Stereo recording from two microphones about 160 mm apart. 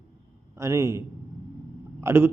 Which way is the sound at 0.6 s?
15° right (ahead or behind).